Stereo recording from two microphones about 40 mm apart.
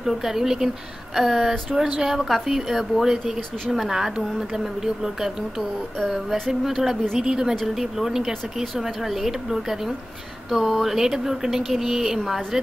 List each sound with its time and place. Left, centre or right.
0.0 s speech: centre